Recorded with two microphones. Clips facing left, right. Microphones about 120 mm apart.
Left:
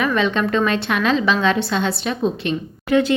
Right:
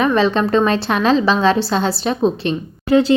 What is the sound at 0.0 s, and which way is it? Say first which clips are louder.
A woman's voice: right 4 dB; 35° right (ahead or behind).